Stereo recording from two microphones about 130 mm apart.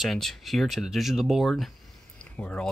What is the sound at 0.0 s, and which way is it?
Speech, centre (ahead or behind).